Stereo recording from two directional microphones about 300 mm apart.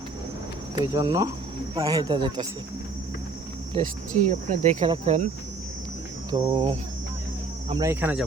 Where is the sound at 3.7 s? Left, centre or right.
Right.